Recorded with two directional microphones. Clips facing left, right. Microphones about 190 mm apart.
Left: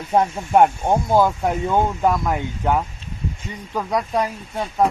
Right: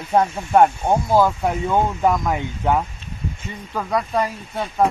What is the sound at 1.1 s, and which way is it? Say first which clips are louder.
Speech: even; 15° left (ahead or behind).